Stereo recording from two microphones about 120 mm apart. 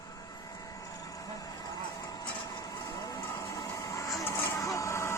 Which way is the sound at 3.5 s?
25° left (ahead or behind).